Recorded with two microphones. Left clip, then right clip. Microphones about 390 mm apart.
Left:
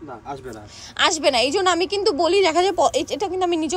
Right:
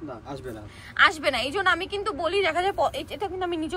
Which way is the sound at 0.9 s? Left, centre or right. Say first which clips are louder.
Left 3 dB; centre.